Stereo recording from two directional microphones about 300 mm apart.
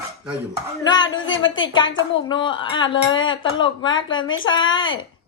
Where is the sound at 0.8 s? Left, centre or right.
Centre.